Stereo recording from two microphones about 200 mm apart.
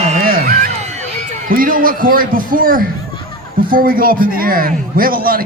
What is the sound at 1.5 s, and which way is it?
A man's voice, 45° right (ahead or behind).